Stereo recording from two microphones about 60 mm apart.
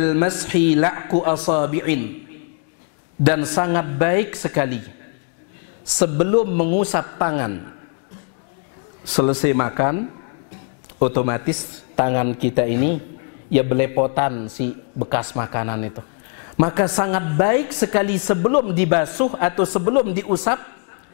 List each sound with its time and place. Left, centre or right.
0.0 s a man's voice: centre
3.3 s speech: centre
5.9 s a man's voice: centre
9.1 s a man's voice: centre